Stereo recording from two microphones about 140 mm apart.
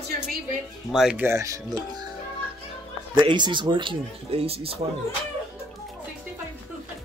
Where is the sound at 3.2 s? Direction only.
35° right (ahead or behind).